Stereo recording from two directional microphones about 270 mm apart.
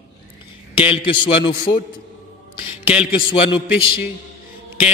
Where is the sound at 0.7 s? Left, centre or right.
Centre.